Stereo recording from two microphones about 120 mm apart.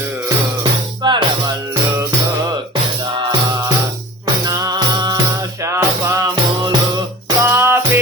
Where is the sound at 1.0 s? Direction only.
40° right (ahead or behind).